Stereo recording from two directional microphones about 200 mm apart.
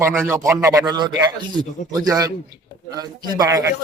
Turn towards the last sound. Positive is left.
turn(degrees=-20)  # may be behind; listen again after turning